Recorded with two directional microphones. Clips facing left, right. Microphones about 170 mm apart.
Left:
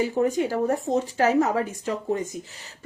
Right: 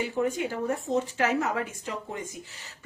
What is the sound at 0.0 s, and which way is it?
Speech, 40° left (ahead or behind).